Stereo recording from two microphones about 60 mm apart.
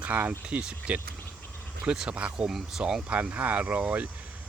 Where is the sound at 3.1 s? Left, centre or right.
Right.